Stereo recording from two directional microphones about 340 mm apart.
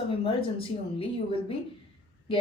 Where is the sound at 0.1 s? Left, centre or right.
Centre.